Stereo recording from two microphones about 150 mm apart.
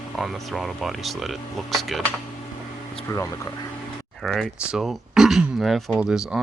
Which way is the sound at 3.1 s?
20° left (ahead or behind).